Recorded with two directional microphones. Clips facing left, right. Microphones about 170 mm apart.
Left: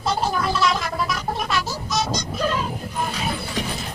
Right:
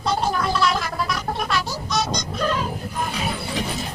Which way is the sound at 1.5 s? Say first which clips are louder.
Even; centre (ahead or behind).